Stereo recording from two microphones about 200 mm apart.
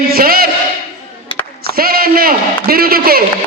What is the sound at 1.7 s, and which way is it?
A man's voice, 50° right (ahead or behind).